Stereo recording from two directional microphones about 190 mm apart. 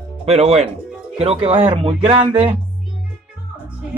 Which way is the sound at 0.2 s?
35° right (ahead or behind).